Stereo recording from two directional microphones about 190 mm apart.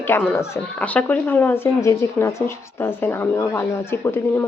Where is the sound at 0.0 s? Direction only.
10° left (ahead or behind).